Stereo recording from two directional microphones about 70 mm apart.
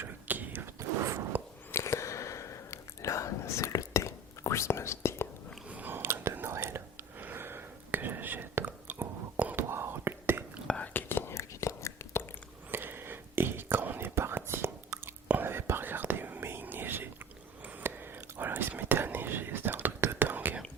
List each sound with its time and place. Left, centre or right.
0.0 s whispering: right
0.8 s a sound: right
1.7 s whispering: left
5.6 s biting: right
6.3 s whispering: right
9.6 s whispering: right
10.8 s whispering: left
12.7 s whispering: right